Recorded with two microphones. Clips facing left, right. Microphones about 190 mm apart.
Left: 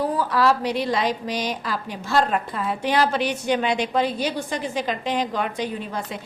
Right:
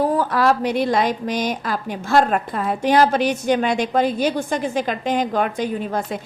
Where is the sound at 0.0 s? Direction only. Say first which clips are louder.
Right 3 dB; 50° right (ahead or behind).